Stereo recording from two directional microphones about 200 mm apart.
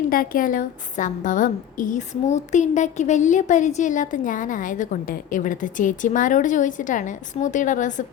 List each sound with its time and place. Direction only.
0.1 s a woman's voice: 45° left (ahead or behind)